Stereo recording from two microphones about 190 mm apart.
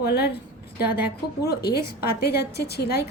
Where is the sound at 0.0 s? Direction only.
60° left (ahead or behind).